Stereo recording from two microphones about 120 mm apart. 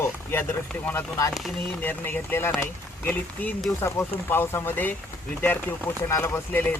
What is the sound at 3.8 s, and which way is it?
Speech, 20° left (ahead or behind).